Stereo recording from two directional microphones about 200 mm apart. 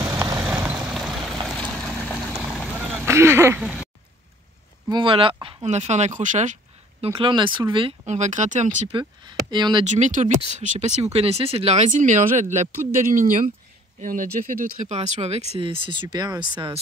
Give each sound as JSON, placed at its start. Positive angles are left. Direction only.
{"t": 0.0, "sound": "vehicle", "side_deg": -15}
{"t": 4.8, "sound": "speech", "side_deg": -25}
{"t": 7.1, "sound": "speech", "side_deg": -25}
{"t": 8.1, "sound": "speech", "side_deg": -35}
{"t": 9.2, "sound": "speech", "side_deg": -20}
{"t": 9.8, "sound": "speech", "side_deg": -35}
{"t": 14.0, "sound": "speech", "side_deg": -40}